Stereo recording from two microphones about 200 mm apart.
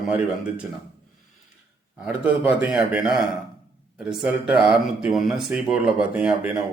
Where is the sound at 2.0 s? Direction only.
5° right (ahead or behind).